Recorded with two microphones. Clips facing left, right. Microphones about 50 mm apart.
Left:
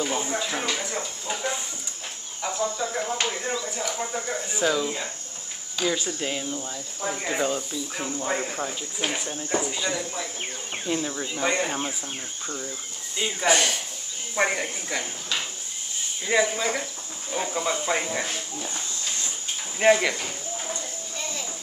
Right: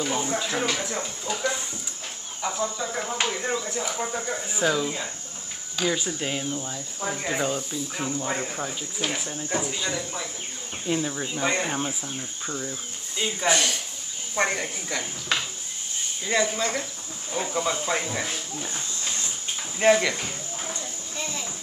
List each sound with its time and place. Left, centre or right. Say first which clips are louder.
0.0 s speech: even; centre
1.2 s speech: right 3 dB; centre
2.4 s speech: left 1 dB; centre
12.4 s speech: right 2 dB; centre
13.5 s speech: left 2 dB; centre
16.3 s speech: left 2 dB; centre
19.8 s speech: even; centre